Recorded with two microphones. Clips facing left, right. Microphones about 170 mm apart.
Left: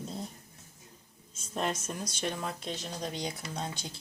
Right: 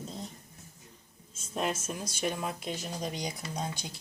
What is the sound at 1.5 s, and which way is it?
Speech, 5° right (ahead or behind).